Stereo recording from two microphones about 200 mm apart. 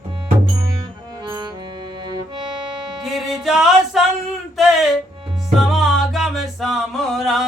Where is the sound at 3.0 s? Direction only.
Centre (ahead or behind).